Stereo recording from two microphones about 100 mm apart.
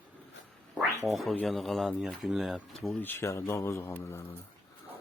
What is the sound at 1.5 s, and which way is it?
Speech, centre (ahead or behind).